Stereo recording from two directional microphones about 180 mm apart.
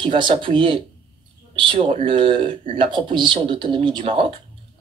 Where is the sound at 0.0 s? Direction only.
25° right (ahead or behind).